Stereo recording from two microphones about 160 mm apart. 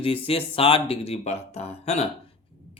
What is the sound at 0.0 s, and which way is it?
Speech, 35° left (ahead or behind).